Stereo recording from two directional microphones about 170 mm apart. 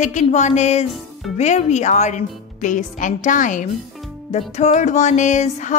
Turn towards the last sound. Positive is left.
turn(degrees=45)  # may be behind; listen again after turning